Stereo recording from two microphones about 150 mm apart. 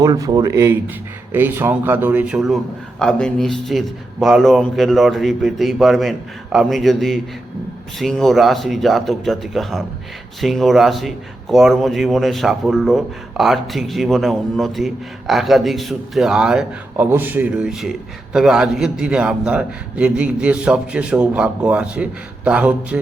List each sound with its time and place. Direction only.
0.0 s a man's voice: 25° right (ahead or behind); by 23.0 s 10° right (ahead or behind)